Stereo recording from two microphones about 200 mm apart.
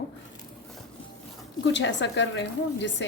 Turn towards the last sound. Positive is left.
turn(degrees=65)  # may be behind; listen again after turning